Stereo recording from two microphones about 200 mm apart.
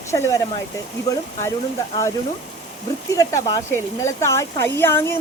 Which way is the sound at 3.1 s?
20° left (ahead or behind).